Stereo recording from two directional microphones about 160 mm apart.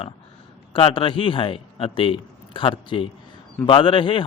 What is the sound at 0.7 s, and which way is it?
A man's voice, 35° left (ahead or behind).